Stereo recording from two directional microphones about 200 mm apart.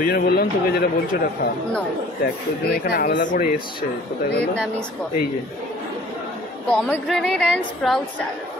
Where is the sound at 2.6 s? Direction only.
50° left (ahead or behind).